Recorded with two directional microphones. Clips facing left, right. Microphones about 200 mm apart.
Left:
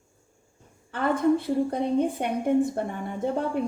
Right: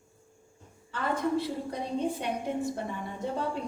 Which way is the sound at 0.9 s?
55° left (ahead or behind).